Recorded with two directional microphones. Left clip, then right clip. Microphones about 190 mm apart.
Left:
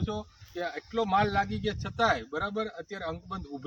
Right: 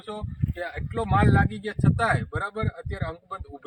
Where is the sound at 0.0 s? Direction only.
25° right (ahead or behind).